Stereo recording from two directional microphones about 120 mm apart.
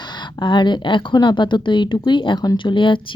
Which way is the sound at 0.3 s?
40° left (ahead or behind).